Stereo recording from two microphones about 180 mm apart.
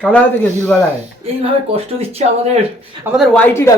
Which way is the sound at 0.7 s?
5° left (ahead or behind).